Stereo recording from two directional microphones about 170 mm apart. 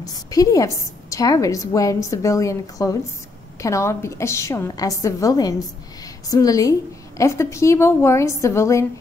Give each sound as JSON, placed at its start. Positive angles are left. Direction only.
{"t": 0.0, "sound": "a woman's voice", "side_deg": 20}